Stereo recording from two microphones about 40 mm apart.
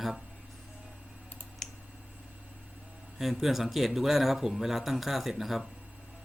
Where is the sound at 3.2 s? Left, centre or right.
Centre.